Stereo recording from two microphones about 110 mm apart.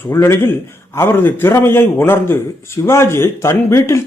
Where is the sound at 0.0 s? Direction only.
20° left (ahead or behind).